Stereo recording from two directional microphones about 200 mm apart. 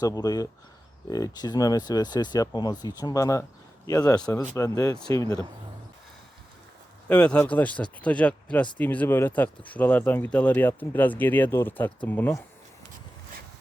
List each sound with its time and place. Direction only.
0.0 s speech: 20° left (ahead or behind)
7.1 s speech: 5° left (ahead or behind)